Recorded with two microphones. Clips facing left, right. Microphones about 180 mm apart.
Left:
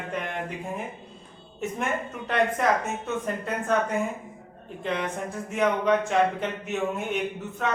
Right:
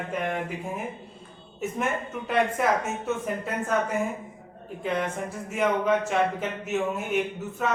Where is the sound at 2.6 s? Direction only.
5° right (ahead or behind).